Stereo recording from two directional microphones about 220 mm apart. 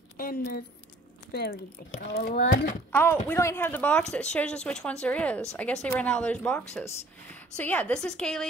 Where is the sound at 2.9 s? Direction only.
10° left (ahead or behind).